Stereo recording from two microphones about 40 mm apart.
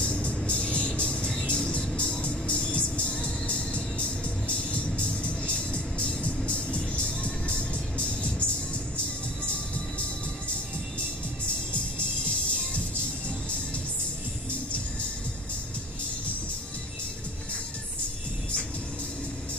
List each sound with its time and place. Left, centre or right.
0.0 s music: left
12.3 s music: left